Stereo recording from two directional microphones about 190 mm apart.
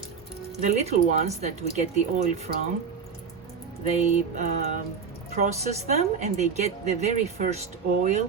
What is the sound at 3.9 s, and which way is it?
Speech, 40° right (ahead or behind).